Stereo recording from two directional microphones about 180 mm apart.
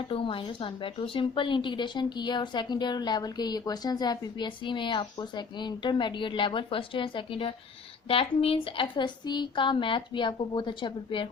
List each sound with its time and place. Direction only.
0.1 s a woman's voice: 30° left (ahead or behind)